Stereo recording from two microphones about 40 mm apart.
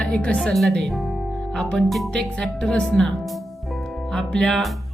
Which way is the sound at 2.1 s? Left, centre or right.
Centre.